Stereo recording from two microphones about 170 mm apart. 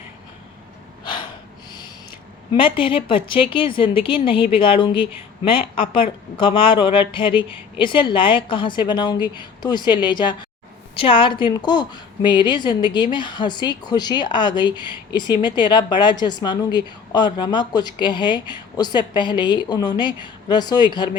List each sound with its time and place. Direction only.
2.5 s a woman's voice: 30° left (ahead or behind)